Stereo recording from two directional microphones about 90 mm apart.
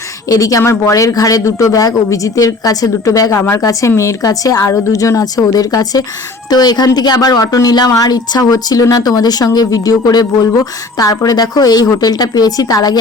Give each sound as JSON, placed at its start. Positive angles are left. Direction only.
{"t": 0.3, "sound": "speech", "side_deg": 40}